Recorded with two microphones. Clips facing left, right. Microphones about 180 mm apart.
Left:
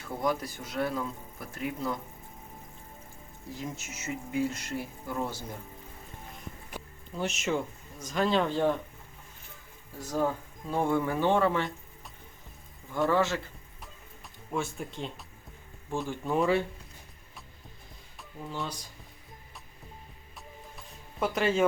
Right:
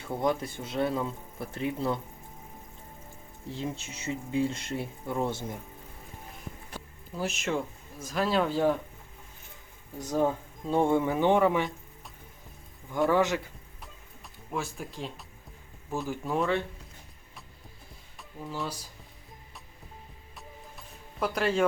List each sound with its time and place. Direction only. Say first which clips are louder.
0.2 s speech: right 1 dB; 25° right (ahead or behind)
3.5 s speech: right 3 dB; 30° right (ahead or behind)
7.2 s speech: even; centre (ahead or behind)
10.0 s speech: right 2 dB; 20° right (ahead or behind)
13.1 s speech: right 2 dB; 15° right (ahead or behind)
14.5 s speech: left 1 dB; centre (ahead or behind)
18.2 s speech: right 1 dB; centre (ahead or behind)
20.7 s music: left 1 dB; centre (ahead or behind)